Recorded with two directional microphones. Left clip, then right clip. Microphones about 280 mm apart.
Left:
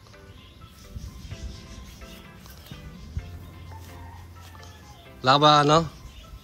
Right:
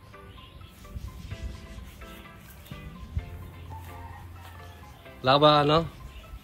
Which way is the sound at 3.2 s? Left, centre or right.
Centre.